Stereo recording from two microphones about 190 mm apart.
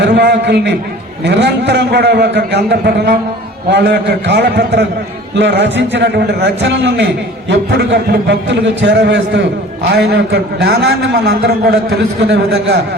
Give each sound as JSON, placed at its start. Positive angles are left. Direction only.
{"t": 0.0, "sound": "a man's voice", "side_deg": -65}